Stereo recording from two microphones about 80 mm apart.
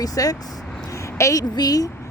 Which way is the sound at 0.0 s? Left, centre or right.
Left.